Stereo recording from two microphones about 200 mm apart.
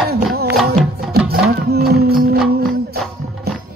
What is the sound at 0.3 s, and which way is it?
Music, 50° right (ahead or behind).